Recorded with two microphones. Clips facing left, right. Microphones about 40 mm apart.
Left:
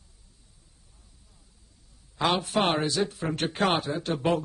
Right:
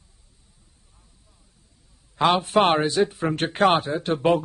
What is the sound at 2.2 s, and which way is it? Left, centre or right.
Speech, right.